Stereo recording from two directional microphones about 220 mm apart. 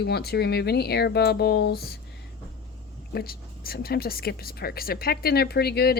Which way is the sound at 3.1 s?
45° left (ahead or behind).